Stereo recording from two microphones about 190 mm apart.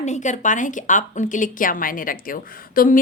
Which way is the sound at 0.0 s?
40° left (ahead or behind).